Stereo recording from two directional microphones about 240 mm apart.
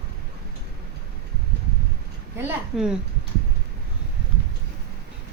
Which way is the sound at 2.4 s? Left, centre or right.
Centre.